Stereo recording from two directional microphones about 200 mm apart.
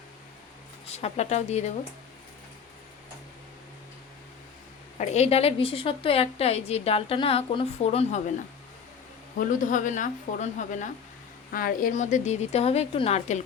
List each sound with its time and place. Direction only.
0.9 s a woman's voice: 30° left (ahead or behind)
4.9 s a woman's voice: 30° left (ahead or behind)
9.4 s a woman's voice: 40° left (ahead or behind)